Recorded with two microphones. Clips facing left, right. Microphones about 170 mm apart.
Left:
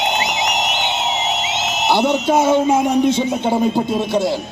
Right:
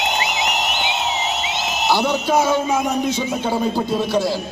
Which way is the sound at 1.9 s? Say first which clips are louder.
Left 3 dB; 25° left (ahead or behind).